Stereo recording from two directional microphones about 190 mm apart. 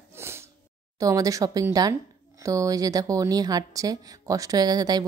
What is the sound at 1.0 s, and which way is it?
Speech, 15° right (ahead or behind).